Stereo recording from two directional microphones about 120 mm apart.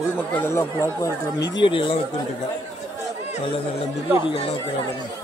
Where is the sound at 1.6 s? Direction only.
45° left (ahead or behind).